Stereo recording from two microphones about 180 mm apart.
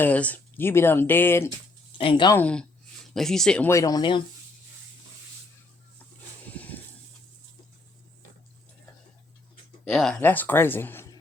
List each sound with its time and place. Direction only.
0.0 s speech: 10° left (ahead or behind)
2.0 s speech: 30° left (ahead or behind)
2.3 s speech: 5° left (ahead or behind); by 4.2 s 25° left (ahead or behind)
6.6 s a sound: 10° left (ahead or behind)
9.9 s speech: centre (ahead or behind)